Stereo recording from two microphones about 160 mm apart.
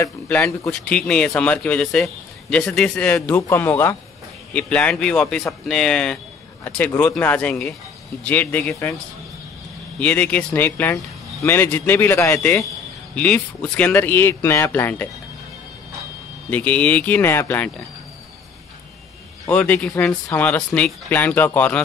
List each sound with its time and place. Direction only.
0.4 s speech: centre (ahead or behind)
6.6 s speech: 15° left (ahead or behind)
9.9 s speech: 10° left (ahead or behind)
16.4 s speech: 10° left (ahead or behind)
19.5 s speech: 10° left (ahead or behind)